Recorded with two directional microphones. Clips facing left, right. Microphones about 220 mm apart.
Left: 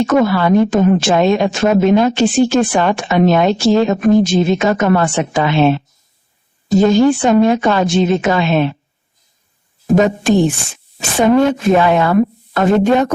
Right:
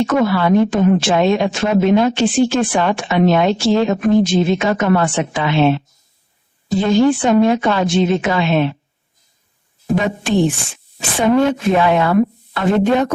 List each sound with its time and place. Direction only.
0.0 s a woman's voice: 45° left (ahead or behind)
9.9 s a woman's voice: 45° left (ahead or behind)